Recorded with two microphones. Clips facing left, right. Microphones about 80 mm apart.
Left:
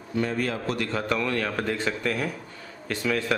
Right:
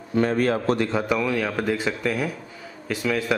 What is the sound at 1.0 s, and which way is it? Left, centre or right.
Speech, centre.